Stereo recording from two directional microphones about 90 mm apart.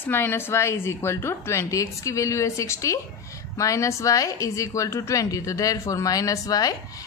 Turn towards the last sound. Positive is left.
turn(degrees=40)  # may be behind; listen again after turning